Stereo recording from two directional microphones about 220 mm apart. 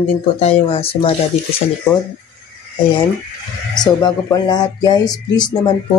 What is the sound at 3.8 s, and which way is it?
Speech, 20° left (ahead or behind).